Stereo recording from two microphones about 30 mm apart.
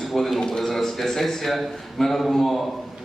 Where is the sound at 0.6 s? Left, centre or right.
Centre.